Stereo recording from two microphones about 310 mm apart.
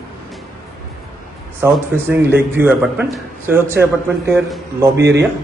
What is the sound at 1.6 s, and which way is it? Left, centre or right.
A man's voice, centre.